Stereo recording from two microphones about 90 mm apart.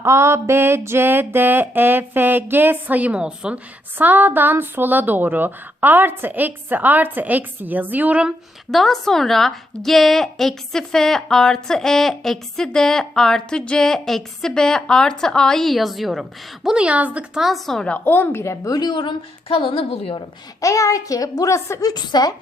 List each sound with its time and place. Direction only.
0.0 s a sound: 30° right (ahead or behind); by 8.3 s 15° right (ahead or behind)
8.7 s a woman's voice: 5° left (ahead or behind)
16.6 s a woman's voice: 10° right (ahead or behind)
17.4 s a woman's voice: centre (ahead or behind)
17.9 s a woman's voice: 20° left (ahead or behind)
18.7 s a woman's voice: 50° left (ahead or behind); by 20.2 s 90° left
20.6 s a woman's voice: 40° left (ahead or behind)